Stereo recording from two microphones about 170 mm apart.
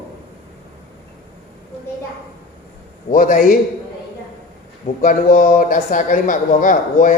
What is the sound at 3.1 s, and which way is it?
Speech, 50° left (ahead or behind).